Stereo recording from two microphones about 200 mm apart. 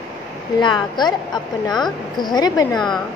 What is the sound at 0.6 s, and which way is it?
Speech, 20° left (ahead or behind).